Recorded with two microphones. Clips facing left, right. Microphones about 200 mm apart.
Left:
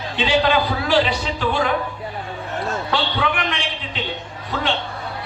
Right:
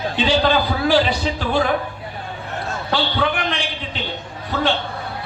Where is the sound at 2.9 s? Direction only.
35° right (ahead or behind).